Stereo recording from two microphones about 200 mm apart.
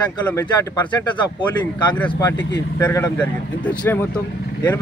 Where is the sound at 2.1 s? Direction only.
20° left (ahead or behind).